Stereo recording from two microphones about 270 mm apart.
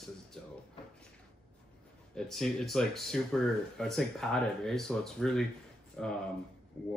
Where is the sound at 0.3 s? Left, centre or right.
Centre.